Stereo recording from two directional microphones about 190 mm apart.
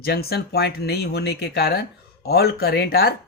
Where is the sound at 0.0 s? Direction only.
55° left (ahead or behind).